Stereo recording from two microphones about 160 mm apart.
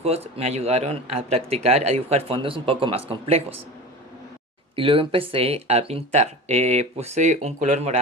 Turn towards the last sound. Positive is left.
turn(degrees=-45)  # may be behind; listen again after turning